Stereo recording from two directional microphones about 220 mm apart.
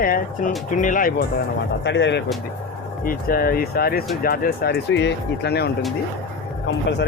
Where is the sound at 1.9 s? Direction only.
55° left (ahead or behind).